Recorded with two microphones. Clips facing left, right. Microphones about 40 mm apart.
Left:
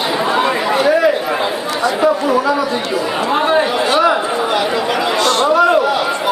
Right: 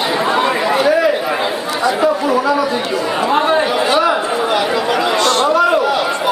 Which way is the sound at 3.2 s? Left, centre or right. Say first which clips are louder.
Even; centre.